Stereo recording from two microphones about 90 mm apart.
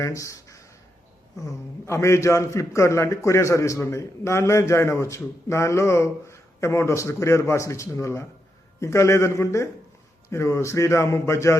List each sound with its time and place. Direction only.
0.0 s a man's voice: 35° left (ahead or behind)